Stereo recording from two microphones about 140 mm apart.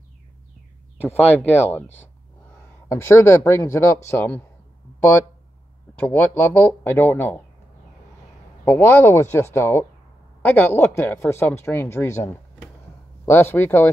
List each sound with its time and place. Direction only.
1.0 s speech: 10° left (ahead or behind)
2.9 s speech: 20° left (ahead or behind)
5.9 s speech: 10° left (ahead or behind)
8.6 s speech: 15° left (ahead or behind)